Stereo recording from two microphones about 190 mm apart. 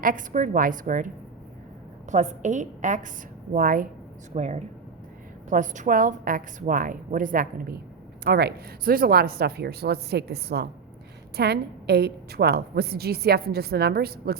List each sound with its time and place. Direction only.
0.0 s a woman's voice: 45° right (ahead or behind)